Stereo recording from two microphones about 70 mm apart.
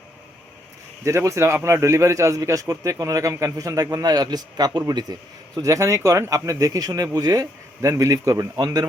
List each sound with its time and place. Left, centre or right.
1.0 s a man's voice: right
3.9 s a man's voice: right
4.9 s a man's voice: right
5.6 s a man's voice: right
7.9 s a man's voice: right
8.5 s speech: right